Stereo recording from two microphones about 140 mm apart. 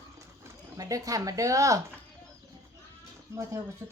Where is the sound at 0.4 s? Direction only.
25° right (ahead or behind).